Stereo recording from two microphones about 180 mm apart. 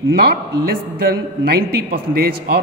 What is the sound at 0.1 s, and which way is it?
Speech, 60° right (ahead or behind).